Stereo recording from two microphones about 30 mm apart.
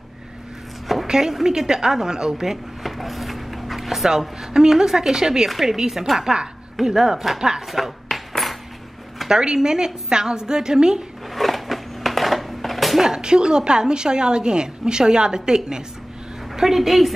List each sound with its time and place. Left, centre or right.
1.0 s a sound: right
1.3 s a woman's voice: centre
2.4 s a sound: centre
4.6 s a woman's voice: centre
5.5 s a woman's voice: centre
7.3 s a woman's voice: right
7.7 s cutlery: centre
9.3 s a woman's voice: right
11.3 s a sound: centre
13.0 s a woman's voice: right
16.5 s a woman's voice: centre